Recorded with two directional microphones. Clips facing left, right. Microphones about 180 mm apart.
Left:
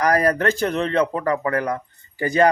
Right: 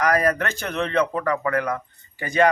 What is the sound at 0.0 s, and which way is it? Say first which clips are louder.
Speech: left 2 dB; 35° left (ahead or behind).